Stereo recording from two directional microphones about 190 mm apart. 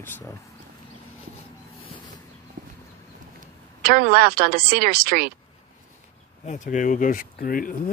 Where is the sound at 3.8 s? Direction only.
50° right (ahead or behind).